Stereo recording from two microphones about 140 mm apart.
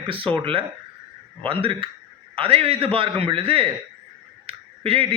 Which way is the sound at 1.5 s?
40° right (ahead or behind).